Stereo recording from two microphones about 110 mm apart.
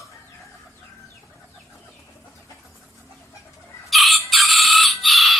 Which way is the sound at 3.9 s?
Centre (ahead or behind).